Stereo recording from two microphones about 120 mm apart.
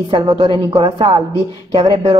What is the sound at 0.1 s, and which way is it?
A woman's voice, 45° right (ahead or behind).